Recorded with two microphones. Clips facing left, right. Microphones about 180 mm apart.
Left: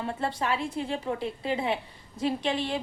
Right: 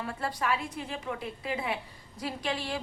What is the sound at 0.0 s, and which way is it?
A woman's voice, 25° left (ahead or behind).